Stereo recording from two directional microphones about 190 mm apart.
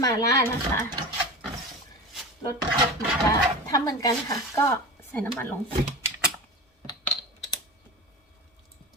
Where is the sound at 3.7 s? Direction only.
20° left (ahead or behind).